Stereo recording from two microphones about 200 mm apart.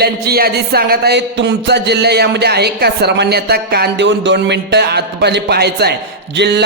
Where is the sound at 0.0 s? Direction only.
50° right (ahead or behind).